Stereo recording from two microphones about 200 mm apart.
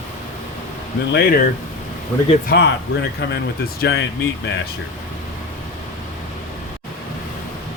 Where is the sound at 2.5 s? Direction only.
55° left (ahead or behind).